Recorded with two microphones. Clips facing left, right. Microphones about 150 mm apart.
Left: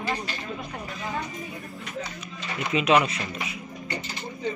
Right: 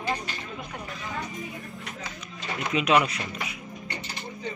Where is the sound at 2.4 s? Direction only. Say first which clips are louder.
Left 1 dB; centre (ahead or behind).